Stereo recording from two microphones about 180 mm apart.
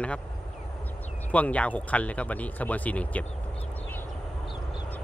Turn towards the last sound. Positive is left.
turn(degrees=10)  # may be behind; listen again after turning